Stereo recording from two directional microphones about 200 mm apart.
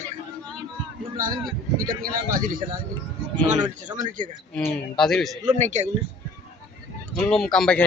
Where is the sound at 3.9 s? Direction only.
25° right (ahead or behind).